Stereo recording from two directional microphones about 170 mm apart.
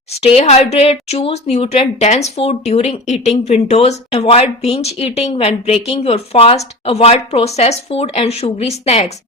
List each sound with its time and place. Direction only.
0.2 s speech: 40° left (ahead or behind)